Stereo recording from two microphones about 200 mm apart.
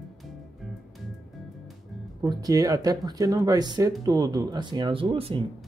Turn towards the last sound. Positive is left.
turn(degrees=-25)  # may be behind; listen again after turning